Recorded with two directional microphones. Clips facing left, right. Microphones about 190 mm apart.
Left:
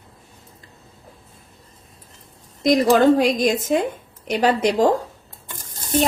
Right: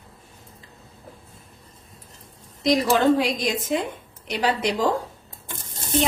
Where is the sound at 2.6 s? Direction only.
45° left (ahead or behind).